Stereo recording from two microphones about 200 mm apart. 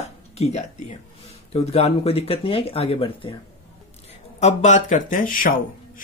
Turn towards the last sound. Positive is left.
turn(degrees=45)  # may be behind; listen again after turning